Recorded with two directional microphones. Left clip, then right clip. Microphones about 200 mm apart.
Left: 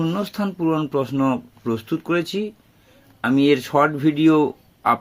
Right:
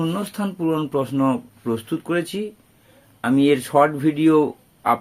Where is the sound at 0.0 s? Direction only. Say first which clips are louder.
Left 1 dB; 15° left (ahead or behind).